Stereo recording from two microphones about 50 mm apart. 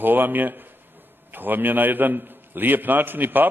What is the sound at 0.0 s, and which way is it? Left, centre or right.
A man's voice, right.